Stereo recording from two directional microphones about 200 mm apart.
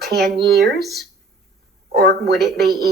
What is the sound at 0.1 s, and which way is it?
Speech, 55° right (ahead or behind).